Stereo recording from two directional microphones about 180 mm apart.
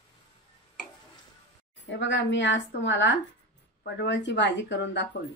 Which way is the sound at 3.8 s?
75° left (ahead or behind).